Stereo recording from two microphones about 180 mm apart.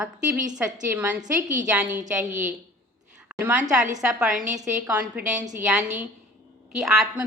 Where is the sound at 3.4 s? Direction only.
10° right (ahead or behind).